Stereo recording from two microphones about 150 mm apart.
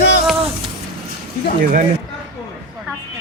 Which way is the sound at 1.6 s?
65° right (ahead or behind).